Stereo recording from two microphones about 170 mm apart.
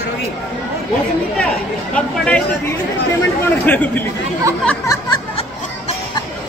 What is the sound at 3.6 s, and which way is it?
Speech, 10° left (ahead or behind).